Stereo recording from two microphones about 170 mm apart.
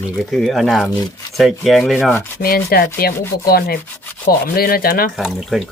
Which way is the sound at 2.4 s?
60° left (ahead or behind).